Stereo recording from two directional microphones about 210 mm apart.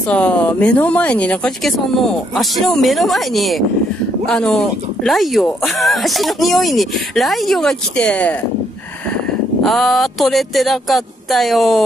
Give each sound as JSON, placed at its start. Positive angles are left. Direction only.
{"t": 0.1, "sound": "speech", "side_deg": 5}
{"t": 9.6, "sound": "speech", "side_deg": 0}